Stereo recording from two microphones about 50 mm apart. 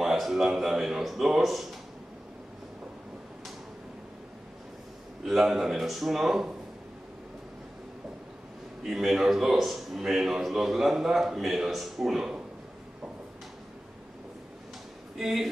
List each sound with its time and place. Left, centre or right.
0.0 s speech: centre
5.2 s a man's voice: centre
8.8 s a man's voice: centre
15.1 s speech: centre